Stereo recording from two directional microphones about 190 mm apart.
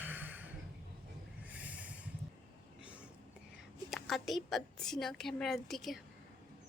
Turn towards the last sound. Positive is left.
turn(degrees=0)  # may be behind; listen again after turning